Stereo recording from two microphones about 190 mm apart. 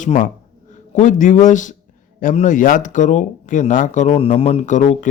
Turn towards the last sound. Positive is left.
turn(degrees=40)  # may be behind; listen again after turning